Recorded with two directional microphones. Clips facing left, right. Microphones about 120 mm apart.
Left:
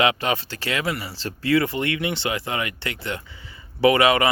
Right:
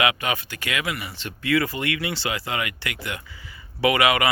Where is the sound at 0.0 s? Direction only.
30° left (ahead or behind).